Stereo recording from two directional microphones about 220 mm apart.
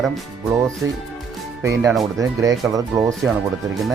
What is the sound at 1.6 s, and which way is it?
Speech, 15° right (ahead or behind).